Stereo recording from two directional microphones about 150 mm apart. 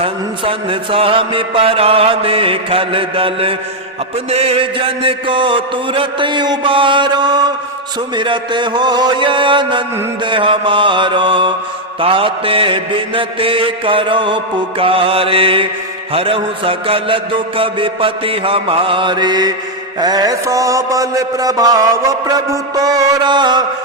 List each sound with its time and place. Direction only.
0.0 s mantra: 35° right (ahead or behind)